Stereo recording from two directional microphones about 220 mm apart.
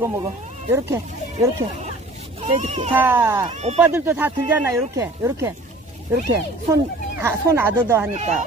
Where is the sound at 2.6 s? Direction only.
30° right (ahead or behind).